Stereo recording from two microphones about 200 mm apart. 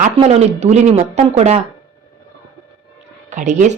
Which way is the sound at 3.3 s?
40° right (ahead or behind).